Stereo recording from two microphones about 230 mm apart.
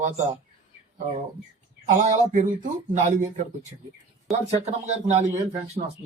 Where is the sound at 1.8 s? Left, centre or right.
Right.